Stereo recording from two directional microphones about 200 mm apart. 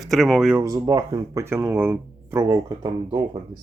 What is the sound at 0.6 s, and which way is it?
Speech, 15° right (ahead or behind).